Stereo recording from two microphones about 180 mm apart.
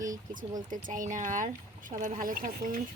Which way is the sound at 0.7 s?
45° right (ahead or behind).